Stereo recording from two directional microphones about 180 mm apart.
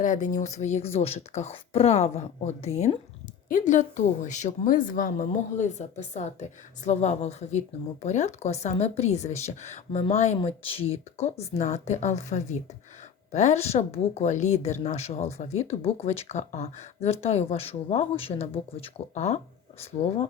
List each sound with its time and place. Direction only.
0.0 s a woman's voice: 45° left (ahead or behind)
6.8 s speech: 40° left (ahead or behind)